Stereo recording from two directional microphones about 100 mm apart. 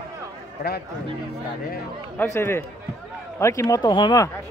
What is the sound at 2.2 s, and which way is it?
Speech, 25° left (ahead or behind).